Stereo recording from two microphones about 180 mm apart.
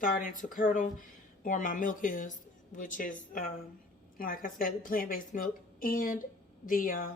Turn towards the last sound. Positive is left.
turn(degrees=50)  # may be behind; listen again after turning